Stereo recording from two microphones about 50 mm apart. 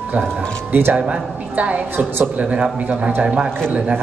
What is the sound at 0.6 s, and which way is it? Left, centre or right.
Speech, right.